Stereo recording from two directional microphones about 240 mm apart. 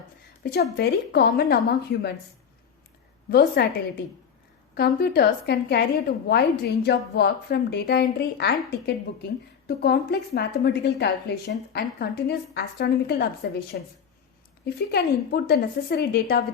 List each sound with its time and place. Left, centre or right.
0.5 s a woman's voice: left
3.2 s a woman's voice: left